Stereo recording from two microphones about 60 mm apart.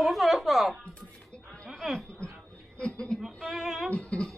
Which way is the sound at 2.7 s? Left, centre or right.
Centre.